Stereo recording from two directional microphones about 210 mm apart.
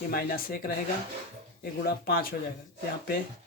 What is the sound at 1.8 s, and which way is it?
Speech, 45° left (ahead or behind).